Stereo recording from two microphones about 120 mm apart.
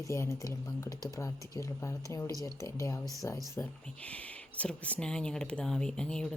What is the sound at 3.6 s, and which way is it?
Speech, 10° left (ahead or behind).